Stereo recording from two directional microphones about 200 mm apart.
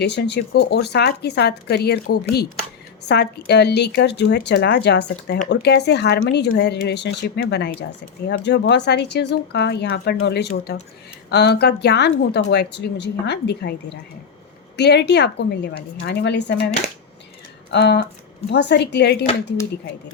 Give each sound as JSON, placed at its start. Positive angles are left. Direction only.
{"t": 0.0, "sound": "a woman's voice", "side_deg": 60}
{"t": 14.8, "sound": "a woman's voice", "side_deg": 55}
{"t": 17.7, "sound": "a sound", "side_deg": 60}
{"t": 18.4, "sound": "a woman's voice", "side_deg": 60}